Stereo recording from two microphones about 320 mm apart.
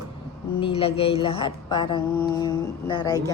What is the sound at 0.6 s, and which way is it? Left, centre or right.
Speech, centre.